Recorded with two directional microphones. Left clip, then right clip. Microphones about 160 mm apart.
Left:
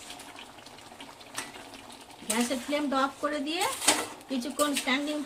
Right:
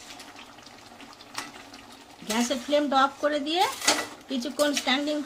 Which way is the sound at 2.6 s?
30° right (ahead or behind).